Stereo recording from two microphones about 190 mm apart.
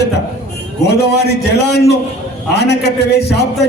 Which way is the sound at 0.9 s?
60° left (ahead or behind).